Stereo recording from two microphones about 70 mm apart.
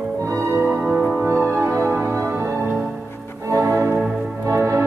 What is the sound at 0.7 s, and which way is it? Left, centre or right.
Music, right.